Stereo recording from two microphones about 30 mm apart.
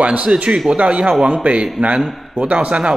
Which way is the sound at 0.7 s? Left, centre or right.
Right.